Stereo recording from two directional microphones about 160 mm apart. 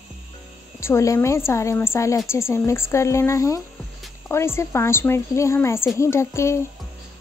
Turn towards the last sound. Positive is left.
turn(degrees=20)  # may be behind; listen again after turning